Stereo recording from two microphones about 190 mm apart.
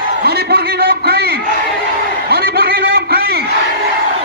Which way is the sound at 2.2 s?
55° right (ahead or behind).